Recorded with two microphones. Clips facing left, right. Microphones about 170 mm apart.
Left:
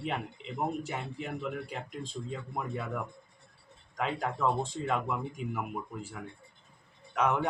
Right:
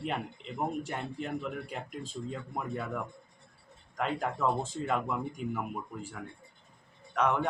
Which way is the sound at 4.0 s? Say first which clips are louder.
Even; centre (ahead or behind).